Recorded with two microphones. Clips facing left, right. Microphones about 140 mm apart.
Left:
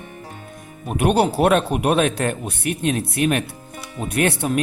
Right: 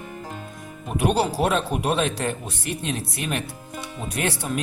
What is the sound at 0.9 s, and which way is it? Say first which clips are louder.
Speech: left 4 dB; 60° left (ahead or behind).